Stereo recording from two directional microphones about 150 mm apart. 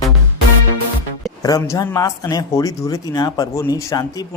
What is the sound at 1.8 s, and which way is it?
A man's voice, 25° left (ahead or behind).